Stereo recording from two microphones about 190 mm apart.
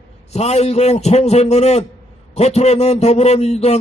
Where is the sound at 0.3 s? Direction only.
35° left (ahead or behind).